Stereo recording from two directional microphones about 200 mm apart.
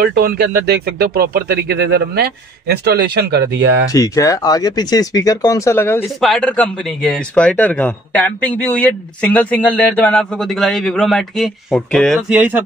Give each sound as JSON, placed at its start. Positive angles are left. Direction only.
{"t": 0.0, "sound": "speech", "side_deg": -50}
{"t": 3.9, "sound": "speech", "side_deg": 15}
{"t": 12.3, "sound": "speech", "side_deg": -10}